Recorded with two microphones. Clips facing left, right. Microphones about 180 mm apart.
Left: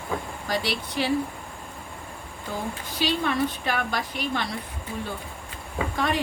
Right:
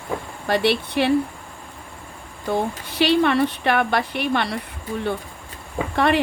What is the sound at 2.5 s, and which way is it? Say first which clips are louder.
A woman's voice: right 8 dB; 70° right (ahead or behind).